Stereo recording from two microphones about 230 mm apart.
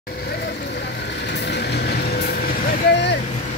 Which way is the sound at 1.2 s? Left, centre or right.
Left.